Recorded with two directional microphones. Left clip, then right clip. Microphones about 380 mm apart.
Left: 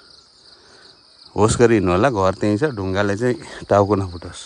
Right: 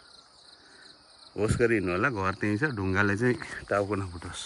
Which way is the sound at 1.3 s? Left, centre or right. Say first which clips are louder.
Left 11 dB; left.